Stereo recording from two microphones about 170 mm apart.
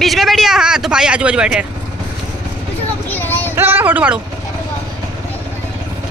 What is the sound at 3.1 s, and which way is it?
Child singing, 10° left (ahead or behind).